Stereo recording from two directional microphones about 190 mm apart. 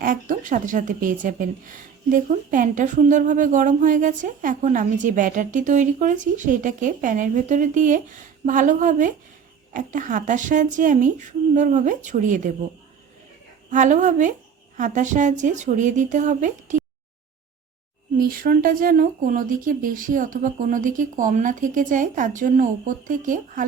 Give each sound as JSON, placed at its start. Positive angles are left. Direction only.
{"t": 0.0, "sound": "a woman's voice", "side_deg": -45}
{"t": 13.7, "sound": "a woman's voice", "side_deg": -40}
{"t": 18.2, "sound": "a woman's voice", "side_deg": -50}